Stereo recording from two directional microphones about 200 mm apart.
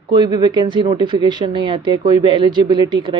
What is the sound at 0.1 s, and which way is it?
Speech, 20° right (ahead or behind).